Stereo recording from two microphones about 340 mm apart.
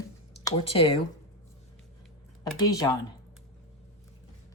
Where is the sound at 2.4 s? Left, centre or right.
Centre.